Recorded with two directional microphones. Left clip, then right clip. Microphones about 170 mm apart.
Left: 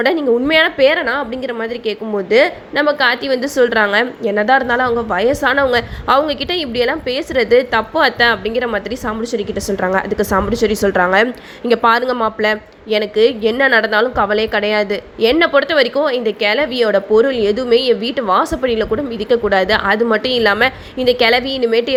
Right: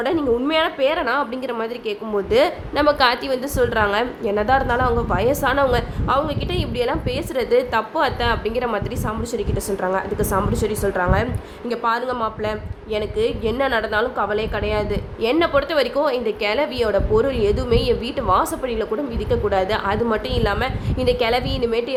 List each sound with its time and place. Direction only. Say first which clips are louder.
0.0 s a woman's voice: left 6 dB; 15° left (ahead or behind)
21.0 s a woman's voice: left 6 dB; 15° left (ahead or behind)